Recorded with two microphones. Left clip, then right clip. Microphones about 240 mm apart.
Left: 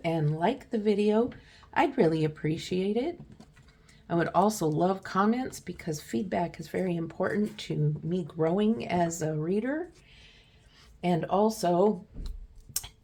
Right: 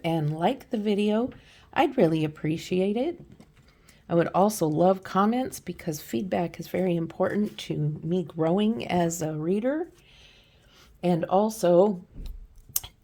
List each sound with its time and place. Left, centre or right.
0.0 s speech: right
11.0 s speech: right
12.7 s tick-tock: right